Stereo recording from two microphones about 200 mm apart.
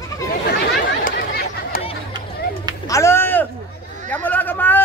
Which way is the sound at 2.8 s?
15° left (ahead or behind).